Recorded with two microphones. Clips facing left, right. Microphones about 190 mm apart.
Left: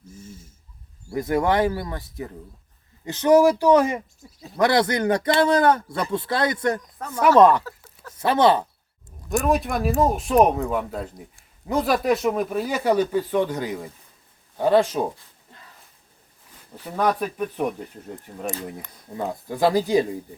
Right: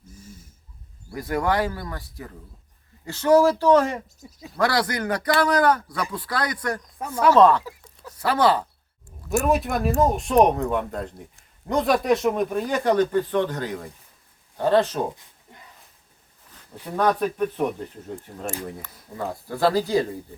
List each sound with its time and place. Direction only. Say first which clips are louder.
1.1 s speech: left 3 dB; 20° left (ahead or behind)
7.2 s speech: left 1 dB; 10° left (ahead or behind)
7.6 s a sound: even; 15° right (ahead or behind)
8.2 s speech: left 2 dB; 20° left (ahead or behind)
9.5 s a man's voice: left 1 dB; centre (ahead or behind)
17.0 s speech: right 1 dB; 10° left (ahead or behind)
18.4 s speech: left 2 dB; 20° left (ahead or behind)